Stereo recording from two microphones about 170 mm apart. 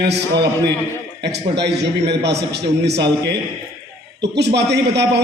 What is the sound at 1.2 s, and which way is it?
A man's voice, 80° right.